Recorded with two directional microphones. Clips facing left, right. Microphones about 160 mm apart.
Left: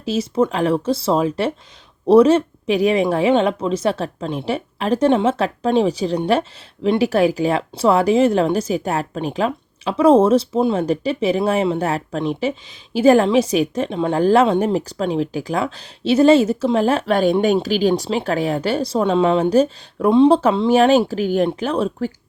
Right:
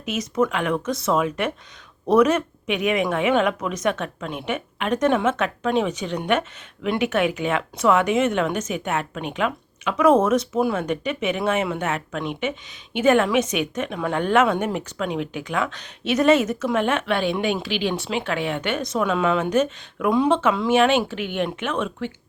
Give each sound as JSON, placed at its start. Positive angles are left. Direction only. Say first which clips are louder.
{"t": 0.0, "sound": "speech", "louder": "left 4 dB", "side_deg": 30}